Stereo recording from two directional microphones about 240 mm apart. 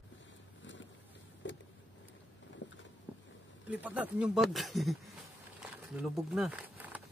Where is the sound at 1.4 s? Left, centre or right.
Left.